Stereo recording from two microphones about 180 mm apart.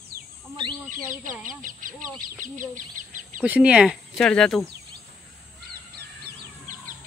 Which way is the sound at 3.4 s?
10° right (ahead or behind).